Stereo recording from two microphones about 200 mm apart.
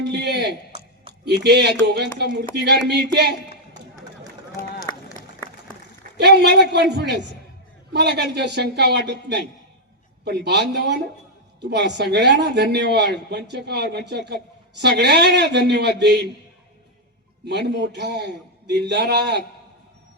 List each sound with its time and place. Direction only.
0.1 s a man's voice: 55° right (ahead or behind)
6.1 s a man's voice: 55° right (ahead or behind)
17.4 s a man's voice: 60° right (ahead or behind)